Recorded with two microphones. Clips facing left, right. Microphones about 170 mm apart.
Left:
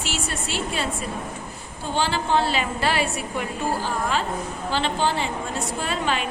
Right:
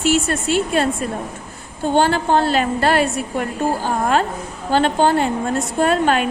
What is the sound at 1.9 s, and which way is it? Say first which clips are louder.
A woman's voice: right 6 dB; 50° right (ahead or behind).